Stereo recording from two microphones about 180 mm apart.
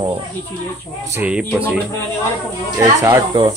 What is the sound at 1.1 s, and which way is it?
Speech, 10° right (ahead or behind).